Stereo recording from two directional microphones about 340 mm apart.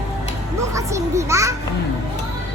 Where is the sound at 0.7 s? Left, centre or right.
Centre.